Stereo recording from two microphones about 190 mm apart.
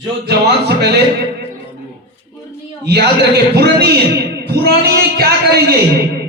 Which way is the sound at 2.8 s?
60° right (ahead or behind).